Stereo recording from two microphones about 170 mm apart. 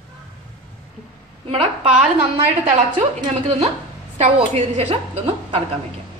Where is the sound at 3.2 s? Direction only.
35° right (ahead or behind).